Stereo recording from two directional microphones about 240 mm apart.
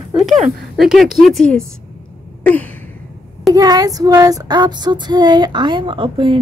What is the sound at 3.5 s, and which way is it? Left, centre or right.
Child singing, centre.